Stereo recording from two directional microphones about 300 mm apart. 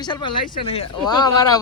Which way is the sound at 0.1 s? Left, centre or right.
Centre.